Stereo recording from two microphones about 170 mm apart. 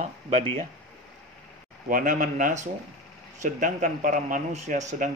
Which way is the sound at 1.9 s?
50° right (ahead or behind).